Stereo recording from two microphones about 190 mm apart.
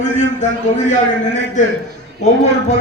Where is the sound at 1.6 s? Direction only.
40° left (ahead or behind).